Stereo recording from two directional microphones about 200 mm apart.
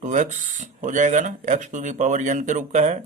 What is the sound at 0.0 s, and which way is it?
Speech, 40° right (ahead or behind).